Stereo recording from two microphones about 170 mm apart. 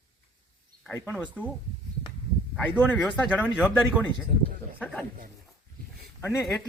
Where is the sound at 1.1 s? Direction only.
10° right (ahead or behind).